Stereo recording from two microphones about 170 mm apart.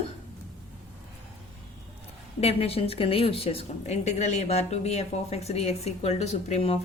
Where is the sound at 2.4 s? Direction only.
35° left (ahead or behind).